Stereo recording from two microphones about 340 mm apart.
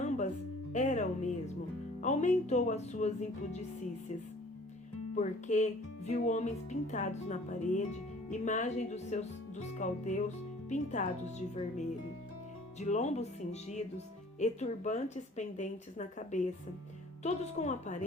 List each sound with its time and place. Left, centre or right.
0.7 s speech: left
5.1 s speech: left